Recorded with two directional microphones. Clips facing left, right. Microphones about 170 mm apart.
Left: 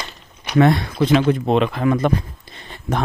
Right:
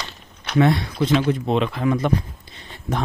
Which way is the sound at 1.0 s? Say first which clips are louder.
Left 4 dB; 70° left (ahead or behind).